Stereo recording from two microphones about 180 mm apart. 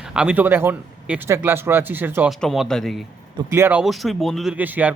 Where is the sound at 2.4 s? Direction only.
Centre (ahead or behind).